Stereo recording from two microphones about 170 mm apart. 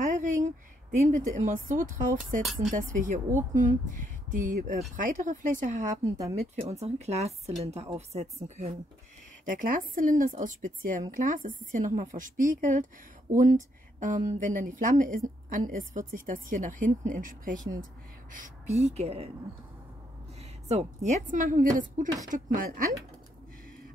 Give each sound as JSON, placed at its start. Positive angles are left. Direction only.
{"t": 0.0, "sound": "a sound", "side_deg": -45}
{"t": 1.0, "sound": "speech", "side_deg": -45}
{"t": 9.4, "sound": "speech", "side_deg": -55}
{"t": 20.6, "sound": "speech", "side_deg": -40}